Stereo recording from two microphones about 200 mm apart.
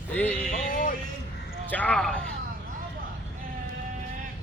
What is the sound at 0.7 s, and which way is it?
Speech, 40° left (ahead or behind).